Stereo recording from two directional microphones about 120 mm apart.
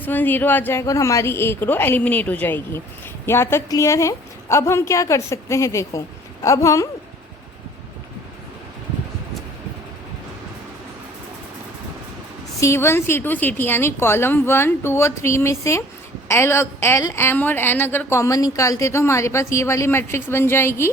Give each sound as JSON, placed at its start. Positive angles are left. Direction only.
{"t": 0.0, "sound": "a woman's voice", "side_deg": 15}
{"t": 12.5, "sound": "a woman's voice", "side_deg": 25}